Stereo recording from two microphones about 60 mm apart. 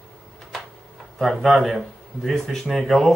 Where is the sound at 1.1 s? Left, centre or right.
Centre.